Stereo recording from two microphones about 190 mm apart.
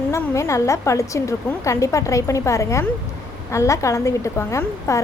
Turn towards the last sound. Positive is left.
turn(degrees=15)  # may be behind; listen again after turning